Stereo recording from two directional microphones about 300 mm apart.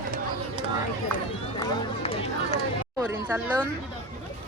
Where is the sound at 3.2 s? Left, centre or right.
Centre.